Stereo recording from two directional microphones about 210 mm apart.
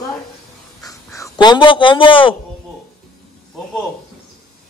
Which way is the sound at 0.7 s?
15° left (ahead or behind).